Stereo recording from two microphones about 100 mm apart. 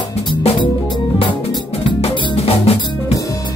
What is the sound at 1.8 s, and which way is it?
Music, 80° left.